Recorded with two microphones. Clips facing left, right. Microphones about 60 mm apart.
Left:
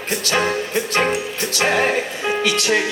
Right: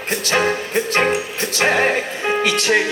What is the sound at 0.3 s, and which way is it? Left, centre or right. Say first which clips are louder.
Music: right 2 dB; centre.